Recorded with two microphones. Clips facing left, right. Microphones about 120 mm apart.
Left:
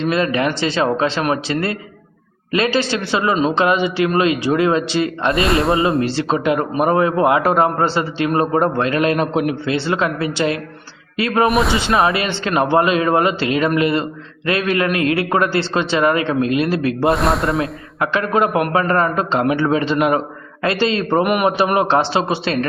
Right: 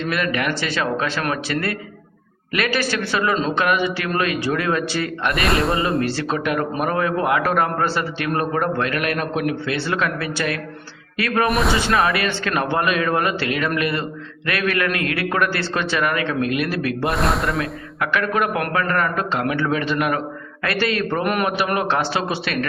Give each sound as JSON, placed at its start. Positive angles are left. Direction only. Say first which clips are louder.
{"t": 0.0, "sound": "a man's voice", "louder": "left 5 dB", "side_deg": 25}
{"t": 5.5, "sound": "speech", "louder": "left 2 dB", "side_deg": 0}
{"t": 6.0, "sound": "a man's voice", "louder": "left 4 dB", "side_deg": 20}
{"t": 11.4, "sound": "speech", "louder": "left 3 dB", "side_deg": 0}
{"t": 11.8, "sound": "a man's voice", "louder": "left 3 dB", "side_deg": 25}
{"t": 17.2, "sound": "speech", "louder": "left 3 dB", "side_deg": 0}
{"t": 17.6, "sound": "a man's voice", "louder": "left 4 dB", "side_deg": 25}